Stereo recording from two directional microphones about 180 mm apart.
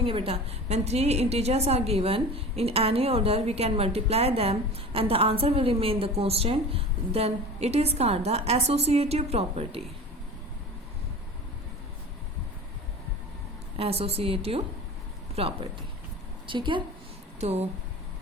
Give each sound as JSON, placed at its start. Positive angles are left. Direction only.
{"t": 0.0, "sound": "a woman's voice", "side_deg": -30}
{"t": 13.7, "sound": "a woman's voice", "side_deg": -35}